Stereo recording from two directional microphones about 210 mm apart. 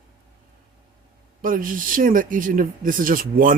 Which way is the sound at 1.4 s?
40° right (ahead or behind).